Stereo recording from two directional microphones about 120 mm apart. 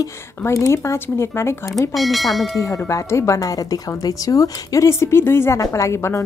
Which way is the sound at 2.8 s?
25° left (ahead or behind).